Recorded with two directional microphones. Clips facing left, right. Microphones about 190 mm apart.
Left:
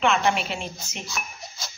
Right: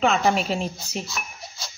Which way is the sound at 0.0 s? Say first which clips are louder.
Right 2 dB; 40° right (ahead or behind).